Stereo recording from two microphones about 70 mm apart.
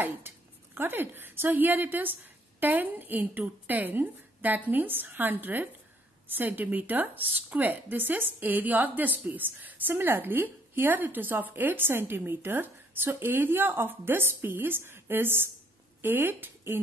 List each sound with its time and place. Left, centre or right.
0.7 s a woman's voice: right